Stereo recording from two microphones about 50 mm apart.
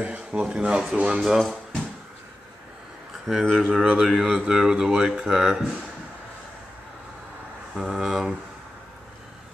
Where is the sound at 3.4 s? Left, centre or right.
Centre.